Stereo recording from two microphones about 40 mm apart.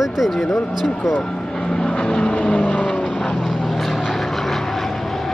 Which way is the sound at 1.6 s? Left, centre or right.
Centre.